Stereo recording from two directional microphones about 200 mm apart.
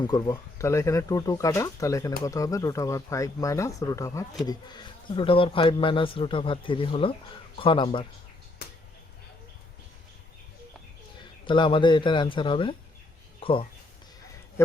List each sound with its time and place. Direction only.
0.0 s a man's voice: 20° left (ahead or behind)
11.4 s a man's voice: 25° left (ahead or behind)